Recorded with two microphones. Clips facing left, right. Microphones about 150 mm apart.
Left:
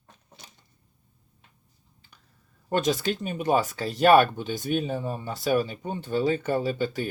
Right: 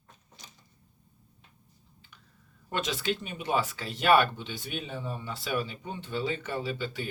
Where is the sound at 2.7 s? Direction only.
40° left (ahead or behind).